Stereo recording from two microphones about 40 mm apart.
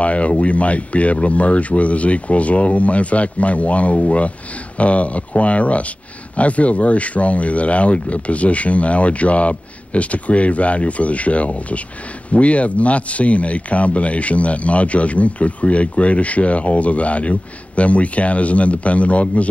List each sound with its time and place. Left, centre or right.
0.0 s speech: left